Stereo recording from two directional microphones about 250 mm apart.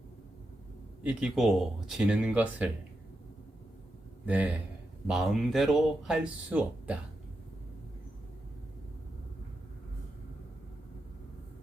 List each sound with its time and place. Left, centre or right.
1.0 s speech: centre
4.3 s speech: centre